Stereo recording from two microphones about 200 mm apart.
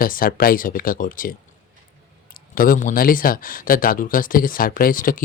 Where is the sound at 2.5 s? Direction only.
45° left (ahead or behind).